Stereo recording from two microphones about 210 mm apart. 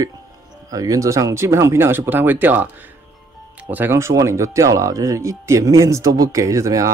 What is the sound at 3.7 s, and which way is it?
Speech, 10° right (ahead or behind).